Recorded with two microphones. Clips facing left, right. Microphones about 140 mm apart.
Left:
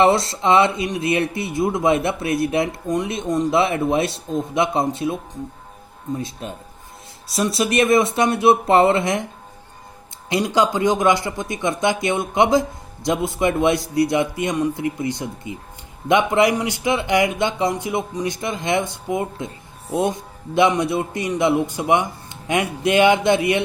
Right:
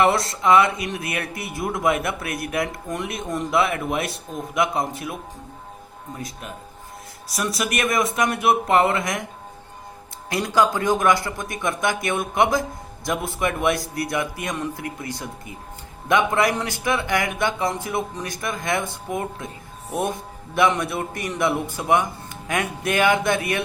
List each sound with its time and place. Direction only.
0.0 s speech: 25° left (ahead or behind)
6.1 s speech: 25° left (ahead or behind)
10.2 s speech: 20° left (ahead or behind)